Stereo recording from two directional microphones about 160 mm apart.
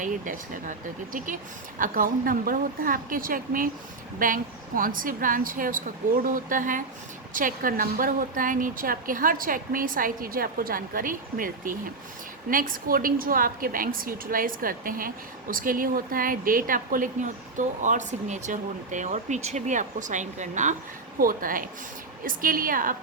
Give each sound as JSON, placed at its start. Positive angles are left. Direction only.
{"t": 0.0, "sound": "a woman's voice", "side_deg": -55}
{"t": 21.2, "sound": "a woman's voice", "side_deg": -60}